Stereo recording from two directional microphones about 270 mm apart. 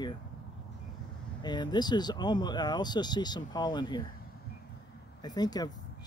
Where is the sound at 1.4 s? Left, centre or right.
Centre.